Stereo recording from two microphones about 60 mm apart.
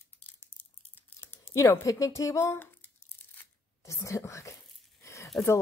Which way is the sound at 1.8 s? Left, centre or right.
Left.